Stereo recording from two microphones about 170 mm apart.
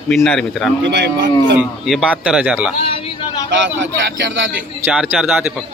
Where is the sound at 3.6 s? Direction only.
90° right.